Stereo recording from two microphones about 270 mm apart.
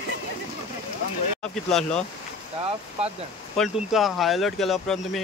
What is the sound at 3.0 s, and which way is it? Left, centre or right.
Speech, right.